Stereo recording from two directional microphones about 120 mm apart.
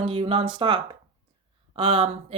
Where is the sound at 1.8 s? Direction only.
55° right (ahead or behind).